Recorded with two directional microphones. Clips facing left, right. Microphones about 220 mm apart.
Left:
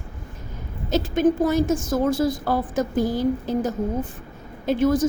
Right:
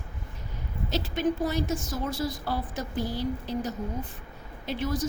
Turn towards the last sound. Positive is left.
turn(degrees=50)  # may be behind; listen again after turning